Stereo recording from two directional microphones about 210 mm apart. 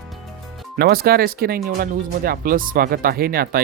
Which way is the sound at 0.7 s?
45° right (ahead or behind).